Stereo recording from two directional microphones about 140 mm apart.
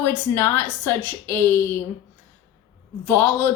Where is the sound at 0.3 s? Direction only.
15° left (ahead or behind).